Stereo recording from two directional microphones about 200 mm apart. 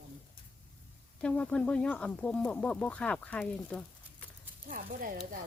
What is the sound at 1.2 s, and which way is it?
Speech, 5° left (ahead or behind).